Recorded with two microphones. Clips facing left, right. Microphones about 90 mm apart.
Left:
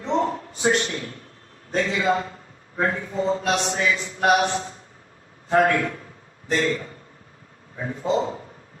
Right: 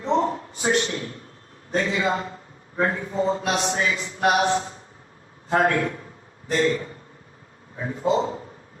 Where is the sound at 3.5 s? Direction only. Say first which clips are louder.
Even; 30° right (ahead or behind).